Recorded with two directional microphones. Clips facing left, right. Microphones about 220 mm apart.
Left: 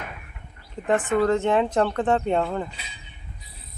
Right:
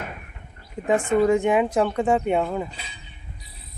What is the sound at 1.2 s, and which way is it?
Speech, 15° right (ahead or behind).